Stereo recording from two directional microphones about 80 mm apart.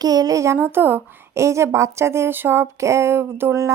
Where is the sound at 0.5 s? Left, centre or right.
Right.